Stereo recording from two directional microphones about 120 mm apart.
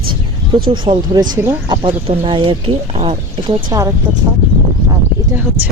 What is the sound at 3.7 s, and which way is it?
Speech, 30° right (ahead or behind).